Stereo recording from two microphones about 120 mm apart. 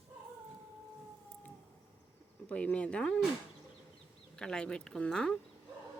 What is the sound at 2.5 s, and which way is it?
Speech, 10° left (ahead or behind).